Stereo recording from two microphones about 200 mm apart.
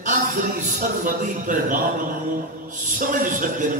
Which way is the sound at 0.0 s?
40° right (ahead or behind).